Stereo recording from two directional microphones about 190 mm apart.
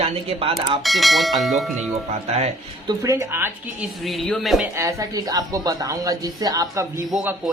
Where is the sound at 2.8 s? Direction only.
15° right (ahead or behind).